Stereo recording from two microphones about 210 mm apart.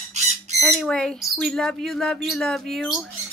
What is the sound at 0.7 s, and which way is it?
Speech, centre (ahead or behind).